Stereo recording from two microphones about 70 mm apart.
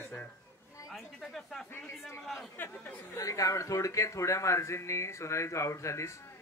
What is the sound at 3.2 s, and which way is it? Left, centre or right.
Speech, left.